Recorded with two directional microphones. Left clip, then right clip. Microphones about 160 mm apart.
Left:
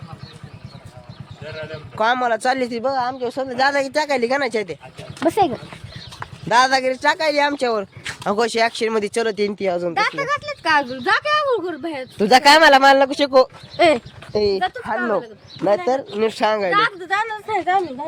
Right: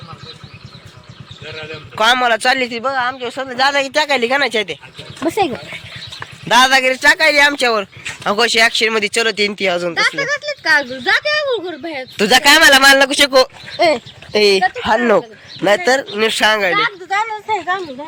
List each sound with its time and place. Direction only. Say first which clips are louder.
2.0 s speech: right 5 dB; 5° left (ahead or behind)
2.6 s a man's voice: right 3 dB; 30° left (ahead or behind)
3.8 s speech: right 4 dB; 10° left (ahead or behind)
6.5 s speech: right 5 dB; 5° left (ahead or behind)
9.9 s speech: right 4 dB; 50° left (ahead or behind)
11.1 s speech: right 2 dB; 15° left (ahead or behind)
13.7 s speech: right 1 dB; 45° left (ahead or behind)
14.3 s speech: right 7 dB; 5° right (ahead or behind)
14.8 s speech: right 10 dB; 35° right (ahead or behind)
15.6 s speech: right 5 dB; 5° left (ahead or behind)
16.7 s a sound: right 2 dB; 45° left (ahead or behind)